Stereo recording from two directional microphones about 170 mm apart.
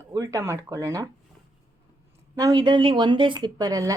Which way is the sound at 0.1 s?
15° right (ahead or behind).